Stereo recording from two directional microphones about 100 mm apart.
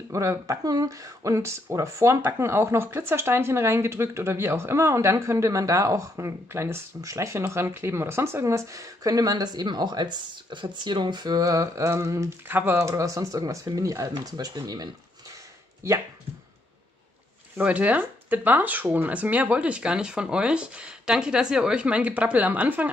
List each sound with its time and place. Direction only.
0.1 s speech: 30° right (ahead or behind)
15.8 s speech: 25° right (ahead or behind)
17.6 s speech: 15° right (ahead or behind)